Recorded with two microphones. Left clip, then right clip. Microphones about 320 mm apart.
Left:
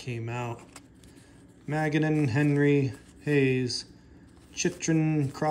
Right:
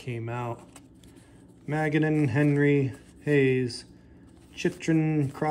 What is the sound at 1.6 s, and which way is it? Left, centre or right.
Speech, centre.